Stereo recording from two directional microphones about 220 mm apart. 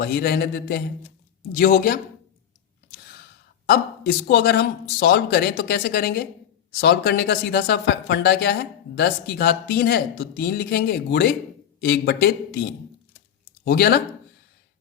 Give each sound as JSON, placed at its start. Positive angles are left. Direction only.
{"t": 0.0, "sound": "speech", "side_deg": 45}
{"t": 3.7, "sound": "speech", "side_deg": 45}
{"t": 13.7, "sound": "speech", "side_deg": 45}